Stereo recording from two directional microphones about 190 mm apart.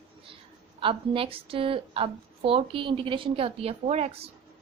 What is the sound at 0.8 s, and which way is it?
A woman's voice, 30° right (ahead or behind).